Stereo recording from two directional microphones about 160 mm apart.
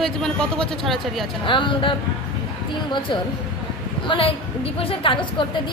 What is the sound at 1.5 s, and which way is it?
A woman's voice, 30° left (ahead or behind).